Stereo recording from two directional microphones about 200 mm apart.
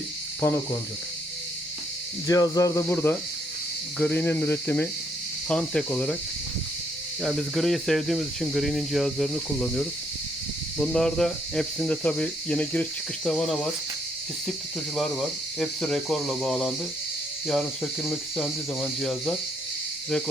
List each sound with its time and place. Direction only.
0.4 s speech: 10° left (ahead or behind)
2.2 s speech: 20° left (ahead or behind)
7.2 s speech: centre (ahead or behind)
14.9 s speech: centre (ahead or behind)